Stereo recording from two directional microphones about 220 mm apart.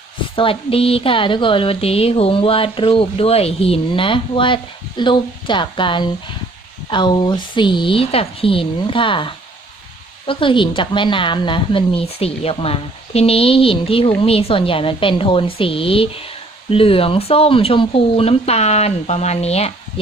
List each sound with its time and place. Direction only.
0.3 s speech: 25° left (ahead or behind)